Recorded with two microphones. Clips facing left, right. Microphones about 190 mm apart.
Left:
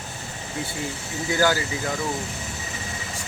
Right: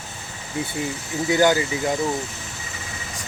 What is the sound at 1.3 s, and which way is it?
Speech, 20° right (ahead or behind).